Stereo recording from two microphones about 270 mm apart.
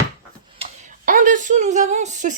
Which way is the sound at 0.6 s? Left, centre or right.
Right.